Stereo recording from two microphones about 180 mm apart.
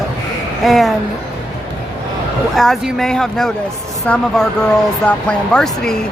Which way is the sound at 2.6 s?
Centre (ahead or behind).